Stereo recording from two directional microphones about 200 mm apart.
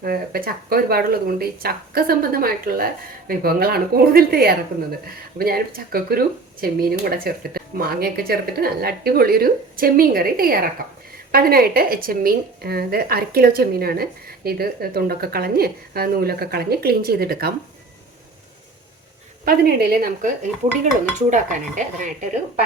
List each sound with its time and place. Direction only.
0.0 s a woman's voice: 45° right (ahead or behind)
19.5 s a woman's voice: 50° right (ahead or behind)